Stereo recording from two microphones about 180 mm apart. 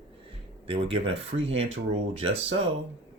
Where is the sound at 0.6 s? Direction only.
30° right (ahead or behind).